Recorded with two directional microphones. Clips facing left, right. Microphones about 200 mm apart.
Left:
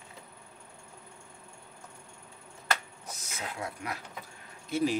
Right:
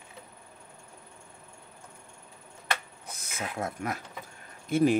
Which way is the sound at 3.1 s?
55° right (ahead or behind).